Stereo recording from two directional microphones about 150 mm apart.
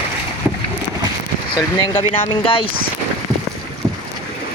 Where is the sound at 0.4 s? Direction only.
10° right (ahead or behind).